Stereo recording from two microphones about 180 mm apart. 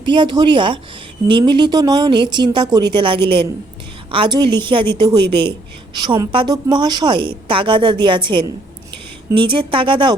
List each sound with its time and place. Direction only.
0.0 s a woman's voice: 25° right (ahead or behind)